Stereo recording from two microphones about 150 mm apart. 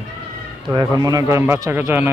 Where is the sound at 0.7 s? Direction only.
25° right (ahead or behind).